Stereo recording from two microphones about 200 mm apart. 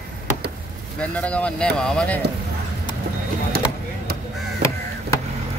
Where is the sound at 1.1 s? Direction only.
5° left (ahead or behind).